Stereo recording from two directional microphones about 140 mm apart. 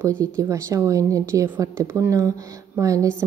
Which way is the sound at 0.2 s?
20° right (ahead or behind).